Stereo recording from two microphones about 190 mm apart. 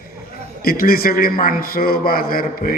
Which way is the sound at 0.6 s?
50° left (ahead or behind).